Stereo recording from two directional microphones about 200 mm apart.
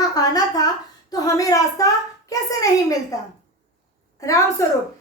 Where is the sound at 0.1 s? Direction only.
20° left (ahead or behind).